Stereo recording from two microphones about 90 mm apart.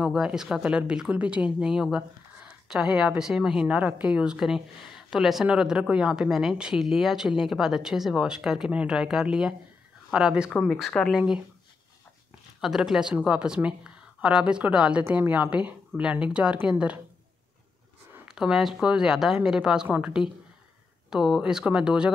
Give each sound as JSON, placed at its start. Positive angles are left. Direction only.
{"t": 0.0, "sound": "speech", "side_deg": -5}
{"t": 12.5, "sound": "speech", "side_deg": -5}
{"t": 18.3, "sound": "speech", "side_deg": -5}